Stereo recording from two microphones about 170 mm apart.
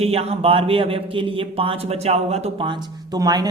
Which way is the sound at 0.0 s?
35° right (ahead or behind).